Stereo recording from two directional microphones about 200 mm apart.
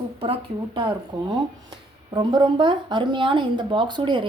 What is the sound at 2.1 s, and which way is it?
A woman's voice, 20° right (ahead or behind).